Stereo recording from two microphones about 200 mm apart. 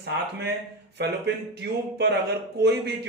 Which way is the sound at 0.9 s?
60° right (ahead or behind).